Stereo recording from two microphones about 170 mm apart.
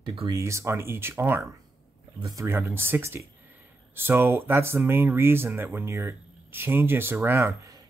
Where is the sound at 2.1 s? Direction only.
30° right (ahead or behind).